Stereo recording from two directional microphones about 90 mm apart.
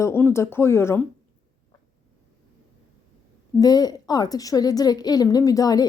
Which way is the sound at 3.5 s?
45° left (ahead or behind).